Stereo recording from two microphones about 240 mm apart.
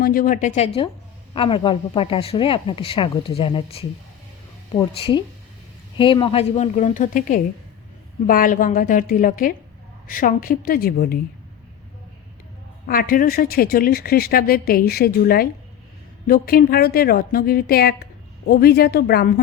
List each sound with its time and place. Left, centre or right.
0.0 s a woman's voice: left
12.9 s a woman's voice: left